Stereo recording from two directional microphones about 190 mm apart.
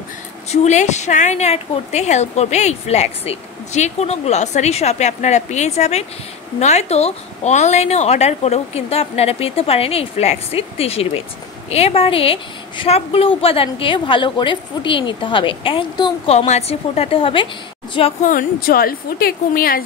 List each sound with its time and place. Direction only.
0.5 s a woman's voice: 40° left (ahead or behind)
18.2 s a woman's voice: 45° left (ahead or behind)